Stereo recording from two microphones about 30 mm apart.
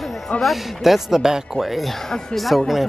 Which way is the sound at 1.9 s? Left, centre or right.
Centre.